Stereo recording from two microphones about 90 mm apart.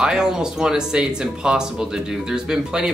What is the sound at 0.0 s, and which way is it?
Speech, 10° right (ahead or behind).